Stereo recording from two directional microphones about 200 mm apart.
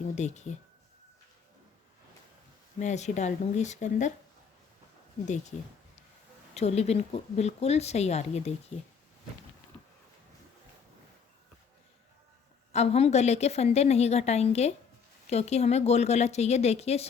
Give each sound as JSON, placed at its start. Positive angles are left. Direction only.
{"t": 0.2, "sound": "a woman's voice", "side_deg": 35}
{"t": 2.7, "sound": "a woman's voice", "side_deg": 35}
{"t": 5.2, "sound": "a woman's voice", "side_deg": 35}
{"t": 12.7, "sound": "a woman's voice", "side_deg": 30}